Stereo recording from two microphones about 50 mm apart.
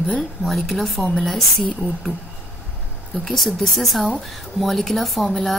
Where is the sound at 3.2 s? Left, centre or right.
Centre.